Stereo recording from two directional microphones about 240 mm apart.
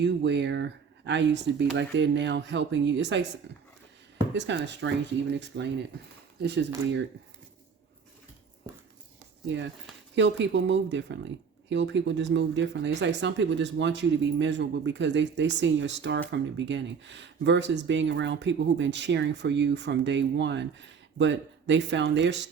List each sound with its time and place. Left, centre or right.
0.0 s speech: right
8.7 s dog: centre
9.5 s speech: right